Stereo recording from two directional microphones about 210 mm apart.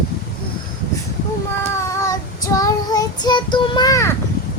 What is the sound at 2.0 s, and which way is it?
Child singing, 15° left (ahead or behind).